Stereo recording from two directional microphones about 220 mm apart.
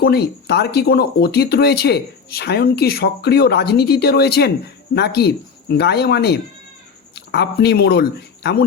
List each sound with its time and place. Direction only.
0.0 s speech: 45° left (ahead or behind)